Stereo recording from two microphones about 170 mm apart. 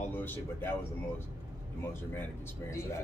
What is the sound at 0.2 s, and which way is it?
Speech, 10° left (ahead or behind).